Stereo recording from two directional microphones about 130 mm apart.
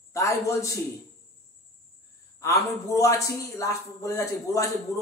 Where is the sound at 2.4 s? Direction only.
25° left (ahead or behind).